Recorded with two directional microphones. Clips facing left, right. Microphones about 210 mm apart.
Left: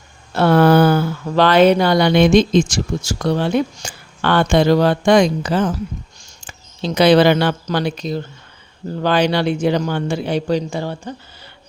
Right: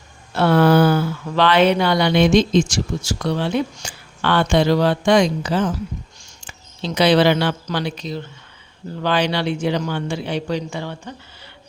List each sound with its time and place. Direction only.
0.3 s speech: 45° left (ahead or behind)